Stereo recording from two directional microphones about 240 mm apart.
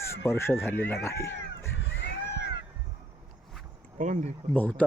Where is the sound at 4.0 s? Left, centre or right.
Right.